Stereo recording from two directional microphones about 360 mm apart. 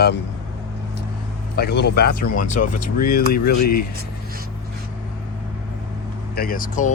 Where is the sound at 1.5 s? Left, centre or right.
Left.